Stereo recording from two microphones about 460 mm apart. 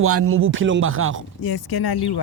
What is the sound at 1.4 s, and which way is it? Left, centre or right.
Speech, left.